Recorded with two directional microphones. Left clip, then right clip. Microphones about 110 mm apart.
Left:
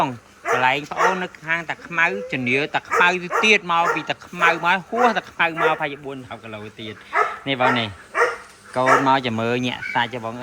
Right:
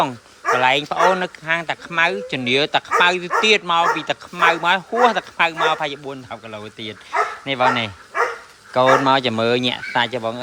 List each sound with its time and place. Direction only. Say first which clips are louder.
0.5 s speech: right 2 dB; 35° right (ahead or behind)
0.9 s speech: right 3 dB; 75° right (ahead or behind)
1.5 s speech: right 2 dB; 50° right (ahead or behind)
3.0 s speech: left 1 dB; 25° right (ahead or behind)
5.5 s a man's voice: right 1 dB; 45° right (ahead or behind)
6.3 s speech: right 2 dB; 35° right (ahead or behind)